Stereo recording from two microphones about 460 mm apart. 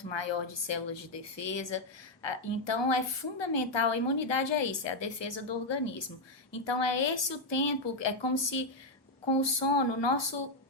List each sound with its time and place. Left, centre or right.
0.0 s a woman's voice: left